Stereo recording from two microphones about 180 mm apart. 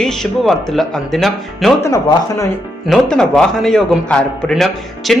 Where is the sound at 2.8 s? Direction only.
5° left (ahead or behind).